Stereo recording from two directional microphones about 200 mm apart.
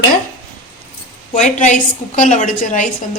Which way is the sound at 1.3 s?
35° left (ahead or behind).